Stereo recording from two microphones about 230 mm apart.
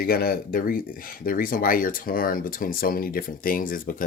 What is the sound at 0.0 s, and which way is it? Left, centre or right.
Speech, left.